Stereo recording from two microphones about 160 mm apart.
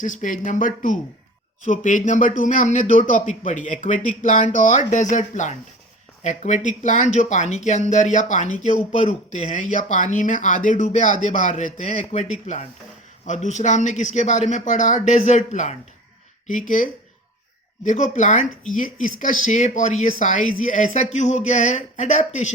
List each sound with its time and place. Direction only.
0.0 s speech: 55° left (ahead or behind)